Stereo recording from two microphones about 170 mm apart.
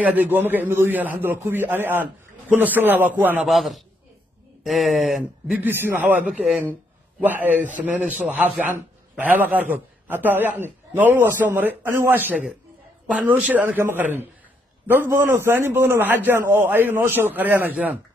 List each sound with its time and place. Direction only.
0.0 s a man's voice: 10° right (ahead or behind)
3.4 s a man's voice: centre (ahead or behind)